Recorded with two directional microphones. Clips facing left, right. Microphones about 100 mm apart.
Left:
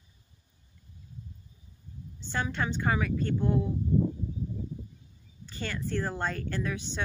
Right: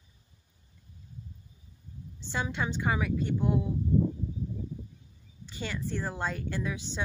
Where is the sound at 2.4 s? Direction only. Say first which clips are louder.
Left 1 dB; 15° right (ahead or behind).